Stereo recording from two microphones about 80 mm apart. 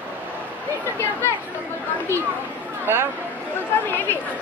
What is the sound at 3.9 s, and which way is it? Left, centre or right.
Speech, left.